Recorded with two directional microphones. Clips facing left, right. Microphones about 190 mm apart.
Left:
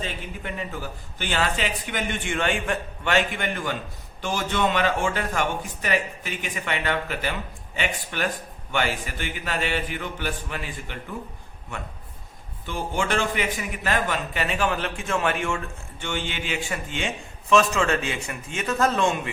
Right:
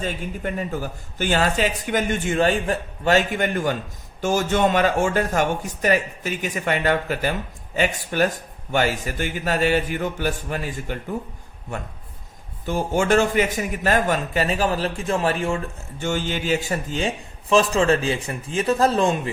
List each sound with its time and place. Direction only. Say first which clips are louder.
0.0 s speech: right 6 dB; 45° right (ahead or behind)
12.6 s speech: right 6 dB; 45° right (ahead or behind)